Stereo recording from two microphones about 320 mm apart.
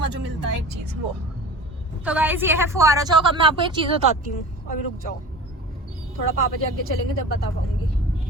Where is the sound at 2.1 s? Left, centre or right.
Centre.